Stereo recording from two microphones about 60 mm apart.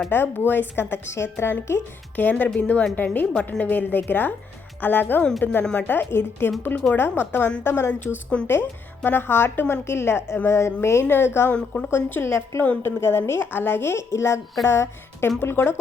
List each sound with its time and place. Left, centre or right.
0.1 s a woman's voice: left
1.0 s a woman's voice: left
2.4 s a woman's voice: left
11.5 s a woman's voice: centre
11.9 s a woman's voice: left
12.3 s a woman's voice: left